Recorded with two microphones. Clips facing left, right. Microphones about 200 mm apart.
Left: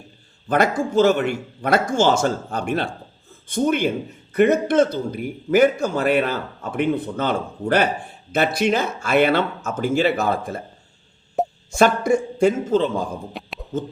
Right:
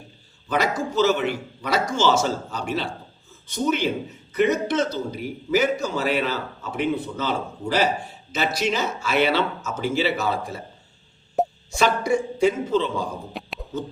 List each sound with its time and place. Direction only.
0.4 s a man's voice: 50° left (ahead or behind)
11.4 s plop: centre (ahead or behind)
11.8 s a man's voice: 50° left (ahead or behind)
13.3 s a sound: centre (ahead or behind)